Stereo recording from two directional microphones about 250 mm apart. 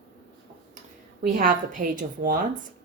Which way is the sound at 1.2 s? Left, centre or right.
Right.